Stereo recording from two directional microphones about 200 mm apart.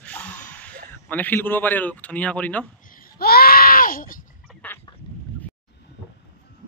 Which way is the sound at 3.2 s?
50° left (ahead or behind).